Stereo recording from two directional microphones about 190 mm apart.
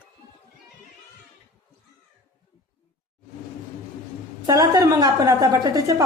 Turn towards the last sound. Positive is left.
turn(degrees=-20)  # may be behind; listen again after turning